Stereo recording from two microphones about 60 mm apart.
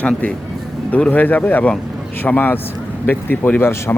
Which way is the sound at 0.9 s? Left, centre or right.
Left.